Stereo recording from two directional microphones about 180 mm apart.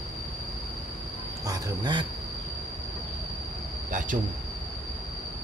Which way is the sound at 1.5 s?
25° right (ahead or behind).